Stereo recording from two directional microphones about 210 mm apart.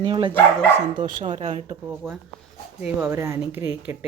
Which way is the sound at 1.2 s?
35° right (ahead or behind).